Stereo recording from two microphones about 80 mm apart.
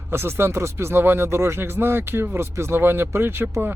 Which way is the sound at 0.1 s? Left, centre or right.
Right.